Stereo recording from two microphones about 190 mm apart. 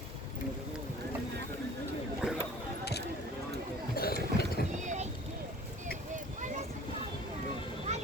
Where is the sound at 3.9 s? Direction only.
55° left (ahead or behind).